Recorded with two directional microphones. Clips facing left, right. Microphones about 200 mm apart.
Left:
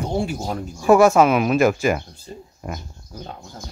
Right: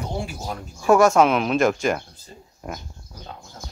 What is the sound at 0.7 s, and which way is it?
Speech, 5° left (ahead or behind).